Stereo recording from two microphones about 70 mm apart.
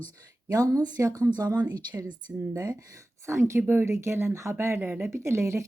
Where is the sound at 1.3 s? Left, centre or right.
Right.